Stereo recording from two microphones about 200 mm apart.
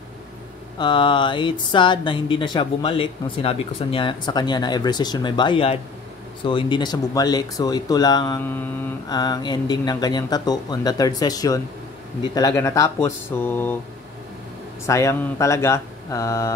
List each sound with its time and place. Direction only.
0.7 s speech: 25° left (ahead or behind)
14.9 s speech: 15° left (ahead or behind)